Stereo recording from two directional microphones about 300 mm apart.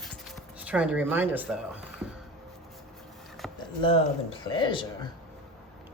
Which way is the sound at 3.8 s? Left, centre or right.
Centre.